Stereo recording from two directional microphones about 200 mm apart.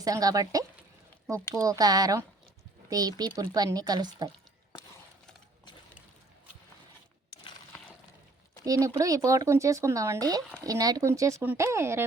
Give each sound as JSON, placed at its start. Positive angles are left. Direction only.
{"t": 0.0, "sound": "speech", "side_deg": -20}
{"t": 8.6, "sound": "speech", "side_deg": -15}